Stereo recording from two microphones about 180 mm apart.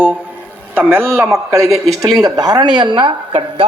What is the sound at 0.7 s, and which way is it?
A man's voice, 10° right (ahead or behind).